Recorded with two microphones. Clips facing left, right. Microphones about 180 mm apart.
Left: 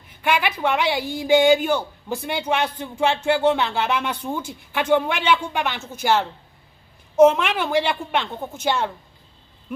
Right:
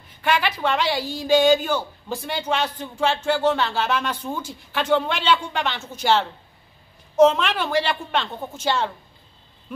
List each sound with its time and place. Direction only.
0.2 s speech: 10° left (ahead or behind)